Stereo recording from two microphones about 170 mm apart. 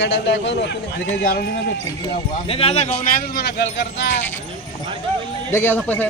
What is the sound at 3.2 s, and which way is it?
Speech, 70° left (ahead or behind).